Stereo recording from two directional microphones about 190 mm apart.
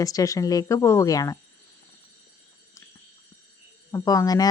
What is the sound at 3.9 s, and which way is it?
Speech, 20° left (ahead or behind).